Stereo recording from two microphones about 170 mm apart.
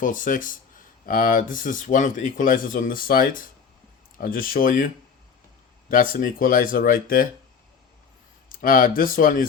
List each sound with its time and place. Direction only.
0.0 s speech: 50° left (ahead or behind)
5.9 s speech: 55° left (ahead or behind)
8.6 s speech: 55° left (ahead or behind)